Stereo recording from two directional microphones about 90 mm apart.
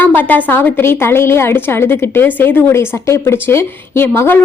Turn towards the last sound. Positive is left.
turn(degrees=25)  # may be behind; listen again after turning